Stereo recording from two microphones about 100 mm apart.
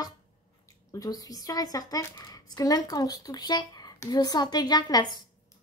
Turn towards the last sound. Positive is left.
turn(degrees=45)  # may be behind; listen again after turning